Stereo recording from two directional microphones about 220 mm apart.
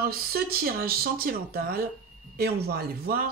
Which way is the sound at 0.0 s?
45° right (ahead or behind).